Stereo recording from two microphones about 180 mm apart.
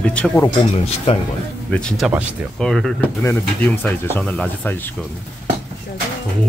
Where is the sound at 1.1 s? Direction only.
35° left (ahead or behind).